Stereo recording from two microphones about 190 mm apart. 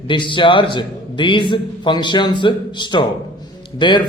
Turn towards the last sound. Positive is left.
turn(degrees=25)  # may be behind; listen again after turning